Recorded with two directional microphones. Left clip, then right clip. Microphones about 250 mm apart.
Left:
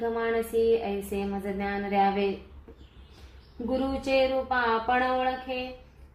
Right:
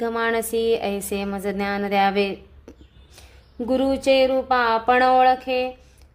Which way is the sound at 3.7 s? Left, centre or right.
Right.